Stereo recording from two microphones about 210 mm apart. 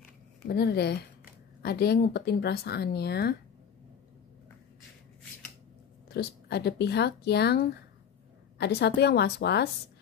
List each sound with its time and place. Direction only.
0.5 s speech: 50° left (ahead or behind)
6.1 s speech: 50° left (ahead or behind)